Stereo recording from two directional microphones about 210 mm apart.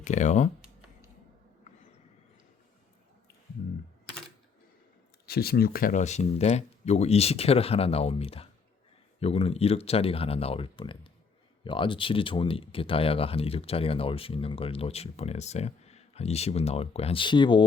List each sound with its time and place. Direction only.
0.0 s speech: 35° left (ahead or behind)
5.2 s speech: 45° left (ahead or behind); by 17.6 s 20° left (ahead or behind)